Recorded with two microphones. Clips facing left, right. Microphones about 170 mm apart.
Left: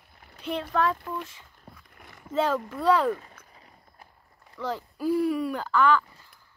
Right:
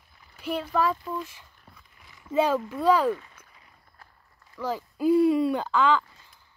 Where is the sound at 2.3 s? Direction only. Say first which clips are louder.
Right 2 dB; 15° right (ahead or behind).